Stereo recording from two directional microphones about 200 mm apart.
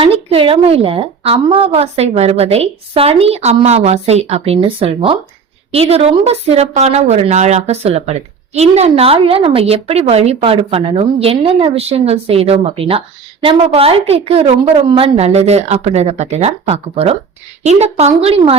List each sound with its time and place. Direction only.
0.0 s a woman's voice: 30° right (ahead or behind)